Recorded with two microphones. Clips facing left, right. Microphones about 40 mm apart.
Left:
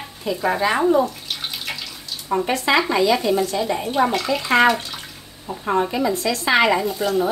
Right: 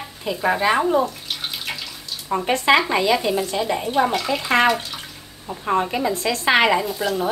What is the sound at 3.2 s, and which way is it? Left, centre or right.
Speech, centre.